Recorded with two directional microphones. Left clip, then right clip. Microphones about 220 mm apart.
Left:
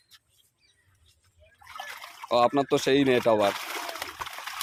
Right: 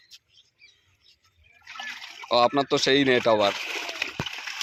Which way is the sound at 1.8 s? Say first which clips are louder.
Right 3 dB; centre (ahead or behind).